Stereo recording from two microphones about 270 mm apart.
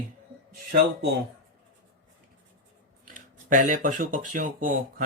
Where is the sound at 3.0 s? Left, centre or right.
Right.